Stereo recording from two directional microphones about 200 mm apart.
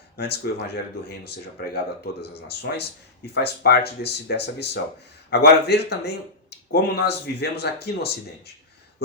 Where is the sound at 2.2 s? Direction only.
55° left (ahead or behind).